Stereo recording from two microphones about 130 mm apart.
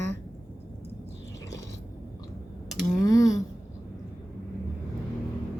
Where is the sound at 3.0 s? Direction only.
25° left (ahead or behind).